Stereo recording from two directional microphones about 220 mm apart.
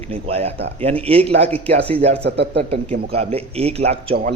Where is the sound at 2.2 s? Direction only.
50° right (ahead or behind).